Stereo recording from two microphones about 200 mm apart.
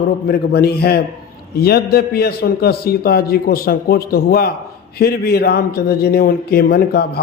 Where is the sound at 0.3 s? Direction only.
50° left (ahead or behind).